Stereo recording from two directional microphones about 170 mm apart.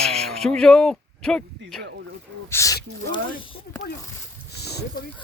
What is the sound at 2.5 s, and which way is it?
Speech, 15° left (ahead or behind).